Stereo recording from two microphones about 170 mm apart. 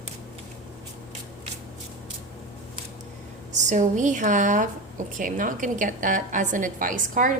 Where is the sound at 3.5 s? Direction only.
45° right (ahead or behind).